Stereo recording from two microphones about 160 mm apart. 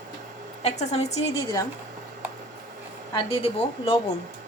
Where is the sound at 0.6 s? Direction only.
45° left (ahead or behind).